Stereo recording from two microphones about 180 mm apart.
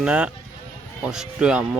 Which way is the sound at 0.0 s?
5° right (ahead or behind).